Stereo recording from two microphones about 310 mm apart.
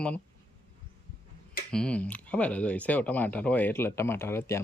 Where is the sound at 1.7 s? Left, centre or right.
Centre.